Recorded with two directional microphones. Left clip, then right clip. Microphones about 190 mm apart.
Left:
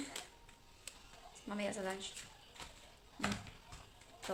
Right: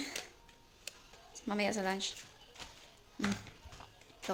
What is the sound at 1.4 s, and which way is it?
Speech, 50° right (ahead or behind).